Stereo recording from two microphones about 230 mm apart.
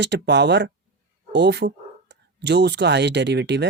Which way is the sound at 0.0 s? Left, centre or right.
Right.